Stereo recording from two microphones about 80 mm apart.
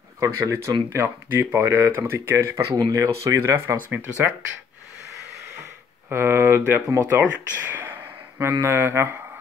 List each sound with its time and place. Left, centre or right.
0.2 s speech: right
2.3 s speech: right
6.0 s speech: right
7.0 s speech: right
7.3 s speech: right